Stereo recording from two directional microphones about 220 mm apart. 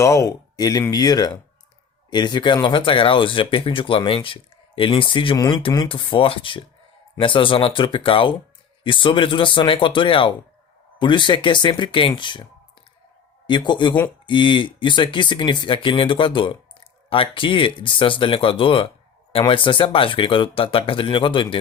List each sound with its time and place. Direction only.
0.0 s speech: 15° left (ahead or behind)
13.5 s speech: 20° left (ahead or behind)